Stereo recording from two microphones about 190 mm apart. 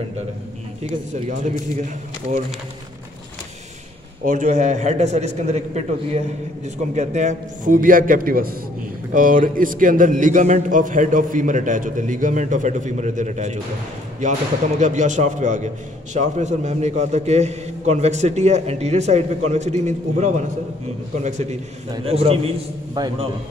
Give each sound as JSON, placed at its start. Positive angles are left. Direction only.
{"t": 4.3, "sound": "a man's voice", "side_deg": -40}
{"t": 14.8, "sound": "a man's voice", "side_deg": -40}
{"t": 22.9, "sound": "a man's voice", "side_deg": -20}